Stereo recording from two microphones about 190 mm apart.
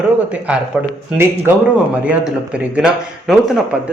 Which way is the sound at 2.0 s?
5° right (ahead or behind).